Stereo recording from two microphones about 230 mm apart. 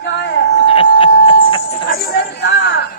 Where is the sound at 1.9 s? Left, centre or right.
Left.